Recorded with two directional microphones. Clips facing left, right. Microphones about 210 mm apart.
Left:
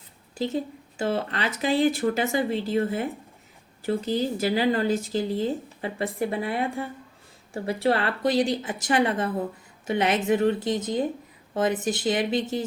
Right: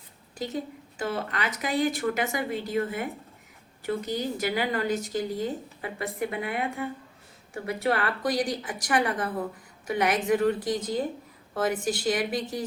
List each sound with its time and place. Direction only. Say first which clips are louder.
0.3 s a woman's voice: left 5 dB; 30° left (ahead or behind)